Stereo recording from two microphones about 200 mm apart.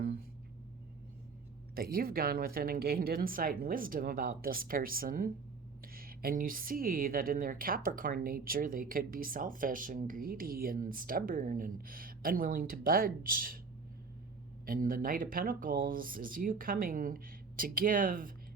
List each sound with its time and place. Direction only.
1.7 s speech: 45° right (ahead or behind)
14.7 s speech: 45° right (ahead or behind)